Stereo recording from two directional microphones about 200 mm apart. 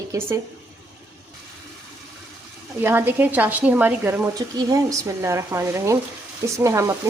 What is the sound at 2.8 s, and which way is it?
Speech, 10° right (ahead or behind).